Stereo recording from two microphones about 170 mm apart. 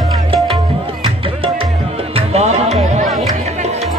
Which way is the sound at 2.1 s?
40° right (ahead or behind).